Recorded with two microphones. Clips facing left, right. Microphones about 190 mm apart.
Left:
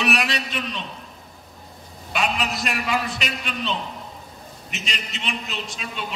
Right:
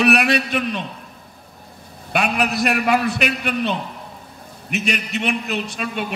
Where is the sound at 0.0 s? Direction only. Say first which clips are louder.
Right 7 dB; 60° right (ahead or behind).